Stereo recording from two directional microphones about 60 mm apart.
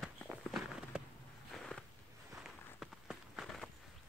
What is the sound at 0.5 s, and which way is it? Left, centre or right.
Walk, centre.